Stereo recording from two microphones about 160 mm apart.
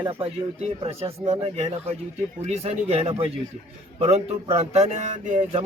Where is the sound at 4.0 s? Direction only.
40° right (ahead or behind).